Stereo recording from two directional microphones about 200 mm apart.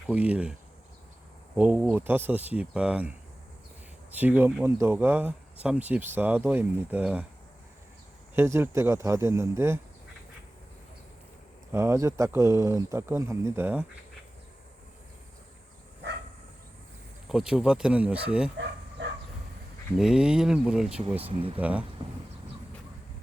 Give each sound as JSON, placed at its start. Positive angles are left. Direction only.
{"t": 0.1, "sound": "speech", "side_deg": -5}
{"t": 1.5, "sound": "speech", "side_deg": -5}
{"t": 8.4, "sound": "speech", "side_deg": -10}
{"t": 11.7, "sound": "speech", "side_deg": -15}
{"t": 17.2, "sound": "speech", "side_deg": -5}
{"t": 20.0, "sound": "speech", "side_deg": -5}
{"t": 21.2, "sound": "speech", "side_deg": -25}
{"t": 21.6, "sound": "speech", "side_deg": -5}